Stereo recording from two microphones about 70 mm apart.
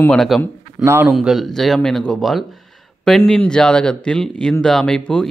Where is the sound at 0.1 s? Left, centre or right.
Centre.